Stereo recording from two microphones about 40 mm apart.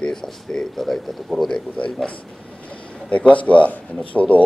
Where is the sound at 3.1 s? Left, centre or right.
Left.